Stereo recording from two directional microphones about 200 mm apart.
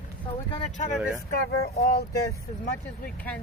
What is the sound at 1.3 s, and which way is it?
Speech, 50° left (ahead or behind).